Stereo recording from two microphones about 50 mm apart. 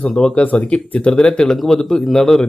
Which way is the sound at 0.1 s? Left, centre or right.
Centre.